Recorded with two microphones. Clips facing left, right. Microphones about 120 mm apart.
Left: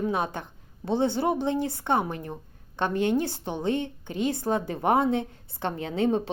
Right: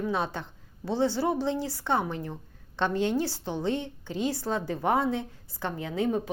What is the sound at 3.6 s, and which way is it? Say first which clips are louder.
Speech: left 3 dB; 55° left (ahead or behind).